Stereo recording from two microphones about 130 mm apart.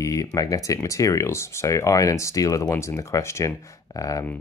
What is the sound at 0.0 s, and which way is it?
Speech, 25° left (ahead or behind).